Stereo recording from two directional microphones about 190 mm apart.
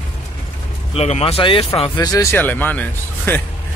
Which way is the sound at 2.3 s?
10° left (ahead or behind).